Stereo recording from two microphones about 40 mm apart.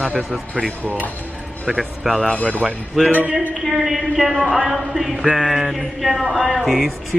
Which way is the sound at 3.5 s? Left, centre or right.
Centre.